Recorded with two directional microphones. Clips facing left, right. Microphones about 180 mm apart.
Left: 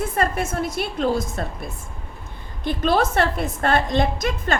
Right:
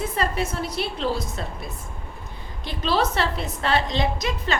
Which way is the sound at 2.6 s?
50° left (ahead or behind).